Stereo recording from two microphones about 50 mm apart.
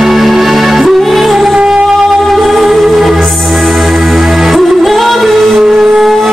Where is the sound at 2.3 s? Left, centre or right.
Centre.